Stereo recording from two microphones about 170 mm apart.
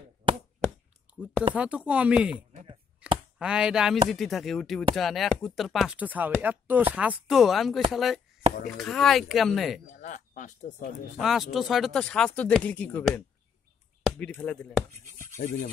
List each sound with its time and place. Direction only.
1.5 s speech: 5° right (ahead or behind)
2.5 s a sound: 35° right (ahead or behind)
3.0 s a sound: 5° right (ahead or behind)
3.3 s speech: 5° right (ahead or behind)
10.0 s speech: 50° left (ahead or behind)
11.1 s speech: centre (ahead or behind)
15.3 s speech: 55° left (ahead or behind)